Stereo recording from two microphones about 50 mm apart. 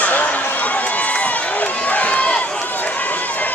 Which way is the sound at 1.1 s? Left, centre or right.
Left.